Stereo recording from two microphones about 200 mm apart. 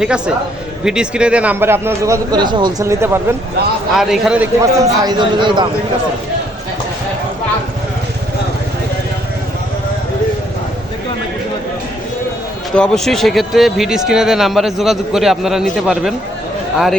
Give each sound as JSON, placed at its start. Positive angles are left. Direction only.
{"t": 0.9, "sound": "a man's voice", "side_deg": -5}
{"t": 3.9, "sound": "speech", "side_deg": 0}
{"t": 4.6, "sound": "a man's voice", "side_deg": -20}
{"t": 12.7, "sound": "speech", "side_deg": 5}